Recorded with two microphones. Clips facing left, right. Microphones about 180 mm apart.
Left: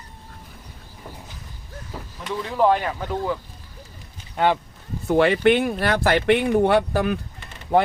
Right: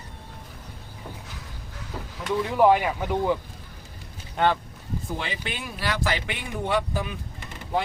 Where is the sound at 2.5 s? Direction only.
10° right (ahead or behind).